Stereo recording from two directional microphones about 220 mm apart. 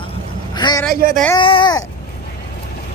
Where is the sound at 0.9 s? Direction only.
40° right (ahead or behind).